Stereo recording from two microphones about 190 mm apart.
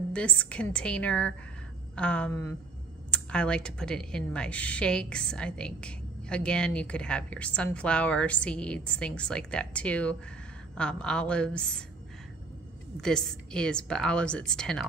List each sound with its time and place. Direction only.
0.1 s a woman's voice: 5° left (ahead or behind)
13.0 s a woman's voice: 5° left (ahead or behind)